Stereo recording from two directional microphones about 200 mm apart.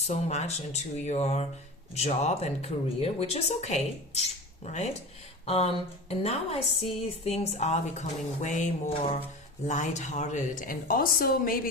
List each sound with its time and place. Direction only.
0.1 s a woman's voice: 35° left (ahead or behind)